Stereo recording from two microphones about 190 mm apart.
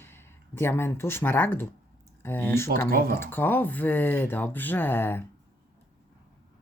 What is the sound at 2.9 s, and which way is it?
Speech, 50° right (ahead or behind).